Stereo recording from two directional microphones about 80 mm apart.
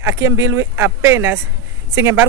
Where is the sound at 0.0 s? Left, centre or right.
Right.